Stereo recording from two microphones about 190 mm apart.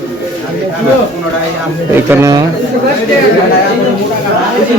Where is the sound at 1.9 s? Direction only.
15° right (ahead or behind).